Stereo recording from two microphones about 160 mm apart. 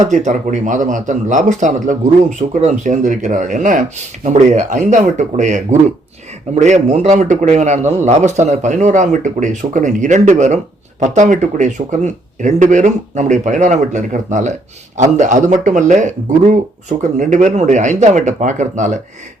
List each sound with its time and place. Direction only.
0.0 s a man's voice: 50° right (ahead or behind)